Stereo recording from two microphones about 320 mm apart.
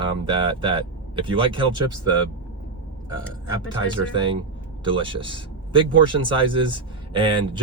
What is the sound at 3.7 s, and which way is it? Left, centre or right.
Speech, centre.